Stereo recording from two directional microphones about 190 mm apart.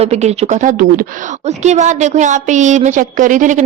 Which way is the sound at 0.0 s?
35° right (ahead or behind).